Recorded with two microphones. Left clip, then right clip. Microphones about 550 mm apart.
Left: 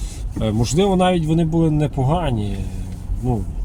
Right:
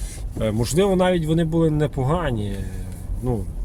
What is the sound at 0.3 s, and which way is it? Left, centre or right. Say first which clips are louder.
Speech: left 1 dB; right.